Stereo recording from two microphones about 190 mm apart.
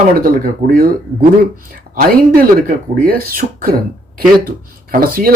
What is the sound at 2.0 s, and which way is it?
Speech, 50° right (ahead or behind).